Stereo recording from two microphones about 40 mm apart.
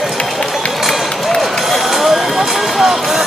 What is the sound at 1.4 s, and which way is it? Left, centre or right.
Run, centre.